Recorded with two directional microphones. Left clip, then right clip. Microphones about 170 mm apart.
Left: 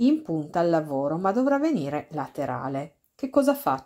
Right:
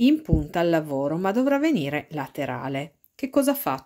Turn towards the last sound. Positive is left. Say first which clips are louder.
# left 1 dB
turn(degrees=-20)  # may be behind; listen again after turning